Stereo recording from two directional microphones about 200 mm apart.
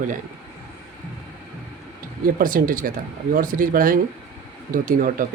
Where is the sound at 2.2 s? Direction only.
45° right (ahead or behind).